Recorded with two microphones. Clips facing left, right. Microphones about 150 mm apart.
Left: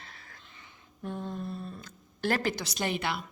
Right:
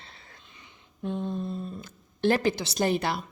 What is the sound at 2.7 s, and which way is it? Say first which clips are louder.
Speech: right 6 dB; 40° right (ahead or behind).